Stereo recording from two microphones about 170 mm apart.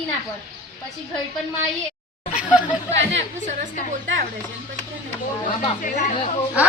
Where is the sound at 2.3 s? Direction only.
10° right (ahead or behind).